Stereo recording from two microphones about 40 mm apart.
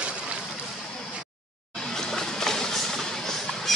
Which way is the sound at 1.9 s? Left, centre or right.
Centre.